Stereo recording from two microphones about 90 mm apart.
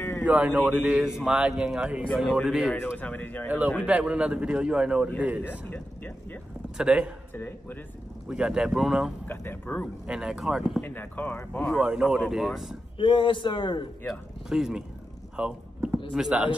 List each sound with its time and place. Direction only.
0.2 s a man's voice: 15° right (ahead or behind)
2.7 s speech: 20° left (ahead or behind)
3.4 s a man's voice: 20° right (ahead or behind)
5.4 s speech: 20° left (ahead or behind)
6.8 s a man's voice: 10° right (ahead or behind)
8.3 s a man's voice: 5° right (ahead or behind)
9.3 s speech: 25° left (ahead or behind)
10.0 s a man's voice: 10° right (ahead or behind)
10.8 s speech: 20° left (ahead or behind)
11.8 s a man's voice: 5° right (ahead or behind)
12.9 s a man's voice: 70° left (ahead or behind)
14.0 s speech: 5° right (ahead or behind)
15.3 s rowboat: 15° right (ahead or behind)
16.1 s a man's voice: 5° right (ahead or behind)